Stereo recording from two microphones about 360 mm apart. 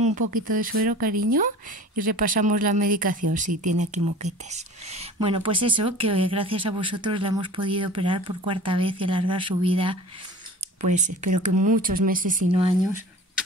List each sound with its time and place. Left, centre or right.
0.3 s speech: right
2.4 s speech: right